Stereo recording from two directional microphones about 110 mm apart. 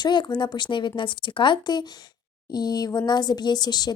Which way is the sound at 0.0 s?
40° left (ahead or behind).